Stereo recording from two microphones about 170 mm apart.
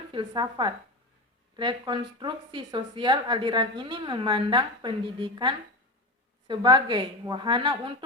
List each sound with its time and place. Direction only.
0.1 s a woman's voice: 30° right (ahead or behind)